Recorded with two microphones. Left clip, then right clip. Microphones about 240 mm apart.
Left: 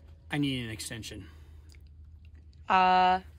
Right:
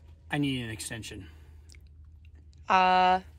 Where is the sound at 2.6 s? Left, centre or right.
Centre.